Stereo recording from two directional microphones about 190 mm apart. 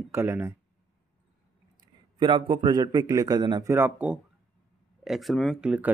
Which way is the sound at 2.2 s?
25° right (ahead or behind).